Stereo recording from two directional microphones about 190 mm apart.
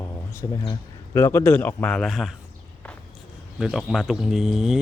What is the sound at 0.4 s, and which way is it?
A man's voice, 25° left (ahead or behind).